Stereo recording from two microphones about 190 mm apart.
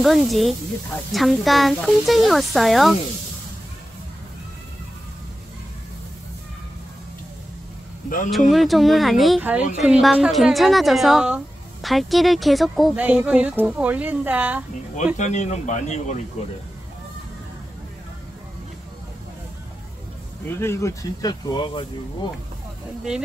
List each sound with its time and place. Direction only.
0.0 s a woman's voice: centre (ahead or behind)
8.5 s a woman's voice: centre (ahead or behind)
15.1 s speech: 40° left (ahead or behind)
20.4 s speech: 15° left (ahead or behind)